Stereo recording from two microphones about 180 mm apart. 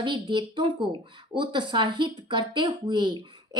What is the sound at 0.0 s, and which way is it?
Speech, 25° right (ahead or behind).